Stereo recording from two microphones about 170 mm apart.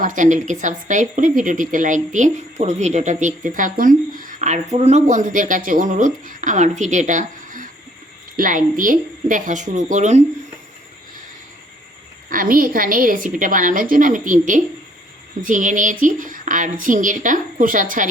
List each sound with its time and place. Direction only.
0.0 s a woman's voice: 50° right (ahead or behind)
12.3 s speech: 55° right (ahead or behind)